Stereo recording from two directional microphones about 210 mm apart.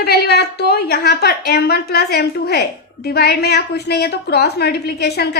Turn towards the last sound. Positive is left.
turn(degrees=50)  # may be behind; listen again after turning